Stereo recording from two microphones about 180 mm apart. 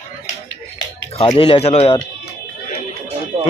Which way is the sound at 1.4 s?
35° left (ahead or behind).